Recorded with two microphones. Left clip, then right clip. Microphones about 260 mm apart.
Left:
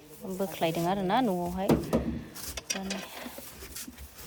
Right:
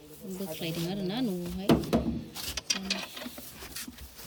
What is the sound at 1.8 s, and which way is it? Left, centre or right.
Drawer open or close, centre.